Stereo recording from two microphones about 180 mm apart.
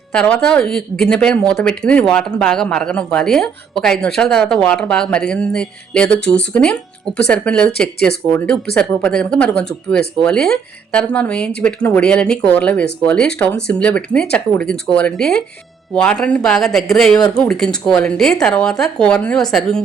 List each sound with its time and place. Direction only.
0.1 s speech: 5° left (ahead or behind)